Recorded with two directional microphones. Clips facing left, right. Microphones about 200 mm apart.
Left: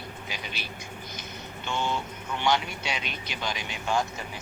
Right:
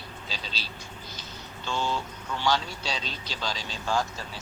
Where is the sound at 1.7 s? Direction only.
20° left (ahead or behind).